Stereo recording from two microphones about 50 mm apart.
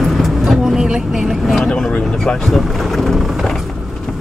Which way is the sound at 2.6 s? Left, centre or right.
Centre.